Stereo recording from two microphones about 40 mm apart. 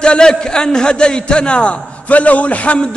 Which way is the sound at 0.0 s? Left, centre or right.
Left.